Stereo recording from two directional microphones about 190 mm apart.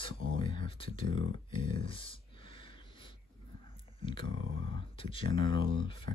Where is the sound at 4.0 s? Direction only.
25° left (ahead or behind).